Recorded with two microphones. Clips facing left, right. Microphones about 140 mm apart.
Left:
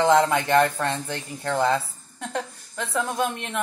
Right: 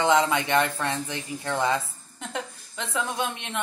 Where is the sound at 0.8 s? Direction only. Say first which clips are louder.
Left 2 dB; 60° left (ahead or behind).